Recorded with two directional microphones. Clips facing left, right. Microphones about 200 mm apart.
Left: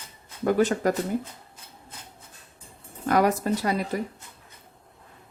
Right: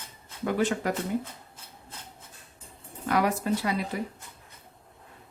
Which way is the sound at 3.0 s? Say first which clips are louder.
Left 4 dB; 45° left (ahead or behind).